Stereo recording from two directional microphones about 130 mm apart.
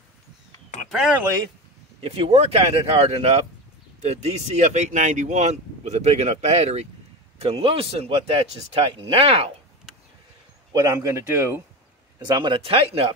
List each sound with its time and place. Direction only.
0.8 s speech: 5° right (ahead or behind)
2.0 s a man's voice: 50° right (ahead or behind)
10.7 s speech: 25° right (ahead or behind)
12.3 s a man's voice: 35° right (ahead or behind)